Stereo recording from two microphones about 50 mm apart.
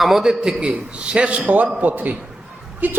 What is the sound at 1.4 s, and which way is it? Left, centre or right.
A man's voice, right.